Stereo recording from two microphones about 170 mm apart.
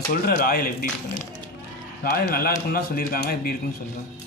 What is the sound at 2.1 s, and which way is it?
Speech, 60° left (ahead or behind).